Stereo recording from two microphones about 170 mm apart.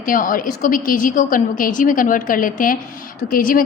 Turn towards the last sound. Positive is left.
turn(degrees=55)  # may be behind; listen again after turning